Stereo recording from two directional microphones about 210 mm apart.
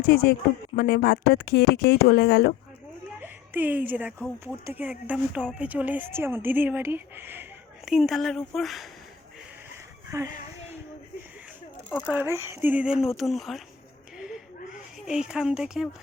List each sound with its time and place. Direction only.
0.0 s speech: 50° left (ahead or behind)
3.2 s a sound: 10° right (ahead or behind)
4.6 s speech: 10° right (ahead or behind)
10.1 s speech: 15° right (ahead or behind)
12.0 s speech: 10° right (ahead or behind)
14.2 s a sound: 5° right (ahead or behind)
14.9 s speech: 5° right (ahead or behind)